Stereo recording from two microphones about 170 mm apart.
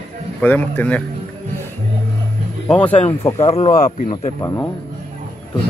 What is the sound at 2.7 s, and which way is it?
Speech, 5° left (ahead or behind).